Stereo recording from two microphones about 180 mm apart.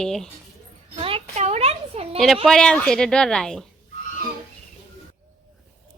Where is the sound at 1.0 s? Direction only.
35° right (ahead or behind).